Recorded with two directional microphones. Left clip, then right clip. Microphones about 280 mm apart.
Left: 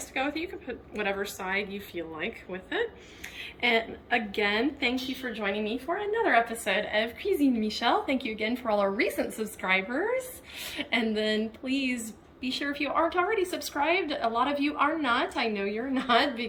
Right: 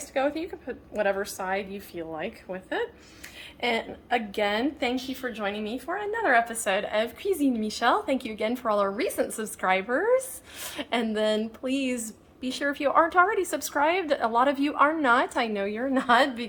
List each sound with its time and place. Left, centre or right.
0.1 s a woman's voice: right